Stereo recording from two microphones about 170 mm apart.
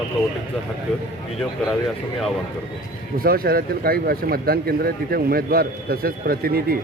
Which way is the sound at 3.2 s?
60° right (ahead or behind).